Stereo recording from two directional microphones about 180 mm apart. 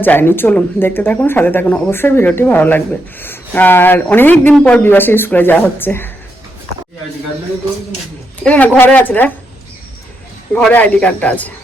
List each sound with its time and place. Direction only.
0.0 s speech: 10° left (ahead or behind)
8.4 s speech: 10° left (ahead or behind)
10.5 s speech: 10° left (ahead or behind)